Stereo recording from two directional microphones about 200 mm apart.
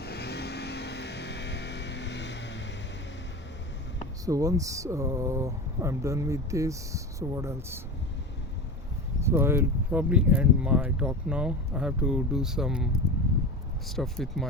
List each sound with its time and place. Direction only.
0.0 s vehicle: 55° left (ahead or behind)
4.3 s speech: 15° right (ahead or behind)
9.2 s speech: 10° right (ahead or behind)